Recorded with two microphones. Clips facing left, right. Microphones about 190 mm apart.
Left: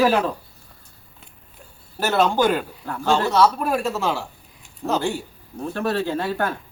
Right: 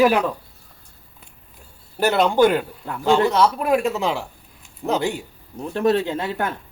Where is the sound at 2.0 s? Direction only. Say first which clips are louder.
Right 3 dB; 15° right (ahead or behind).